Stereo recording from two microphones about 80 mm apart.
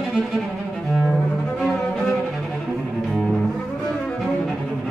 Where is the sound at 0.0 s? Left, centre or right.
Centre.